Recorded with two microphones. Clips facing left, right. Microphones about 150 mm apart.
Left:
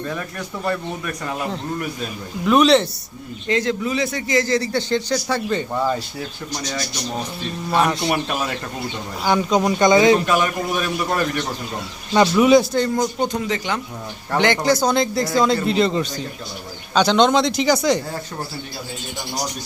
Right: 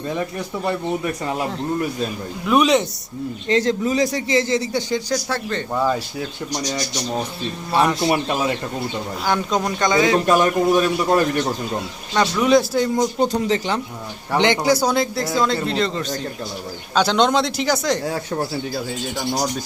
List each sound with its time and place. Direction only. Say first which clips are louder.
0.1 s a man's voice: right 4 dB; 20° right (ahead or behind)
2.5 s speech: left 2 dB; 10° right (ahead or behind)
3.5 s a man's voice: right 2 dB; 35° right (ahead or behind); by 6.0 s centre (ahead or behind)
6.1 s speech: right 3 dB; 20° right (ahead or behind)
7.9 s a man's voice: right 2 dB; centre (ahead or behind)
8.1 s a man's voice: right 3 dB; 25° right (ahead or behind)
9.2 s speech: left 4 dB; 5° left (ahead or behind); by 10.2 s 20° left (ahead or behind)
10.2 s a man's voice: right 4 dB; 40° right (ahead or behind)
12.1 s a man's voice: left 3 dB; 10° left (ahead or behind)
13.2 s a man's voice: right 3 dB; 35° right (ahead or behind)
14.3 s a man's voice: right 1 dB; 20° right (ahead or behind); by 16.0 s 10° left (ahead or behind)
16.9 s a man's voice: left 2 dB; 5° right (ahead or behind)